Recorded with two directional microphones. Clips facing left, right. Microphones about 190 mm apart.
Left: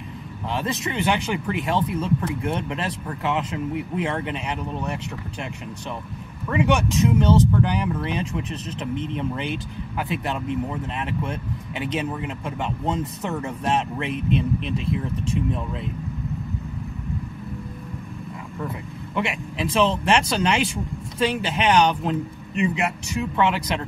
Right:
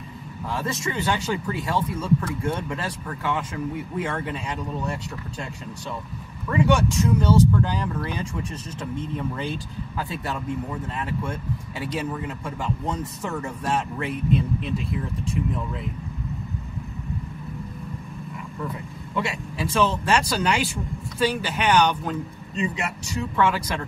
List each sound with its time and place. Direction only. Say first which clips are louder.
0.5 s speech: left 2 dB; 20° left (ahead or behind)
19.1 s speech: left 1 dB; 20° left (ahead or behind)
23.3 s speech: even; 20° left (ahead or behind)